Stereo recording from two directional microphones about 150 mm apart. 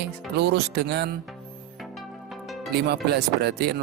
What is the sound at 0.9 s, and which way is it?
Music, 90° right.